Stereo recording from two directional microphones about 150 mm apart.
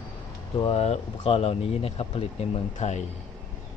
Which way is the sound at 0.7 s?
45° left (ahead or behind).